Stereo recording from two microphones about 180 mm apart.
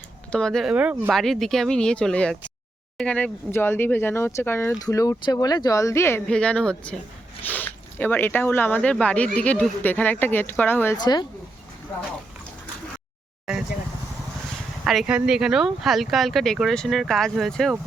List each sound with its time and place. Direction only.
0.3 s speech: 5° left (ahead or behind)
10.9 s speech: 25° left (ahead or behind)
14.8 s speech: 5° right (ahead or behind)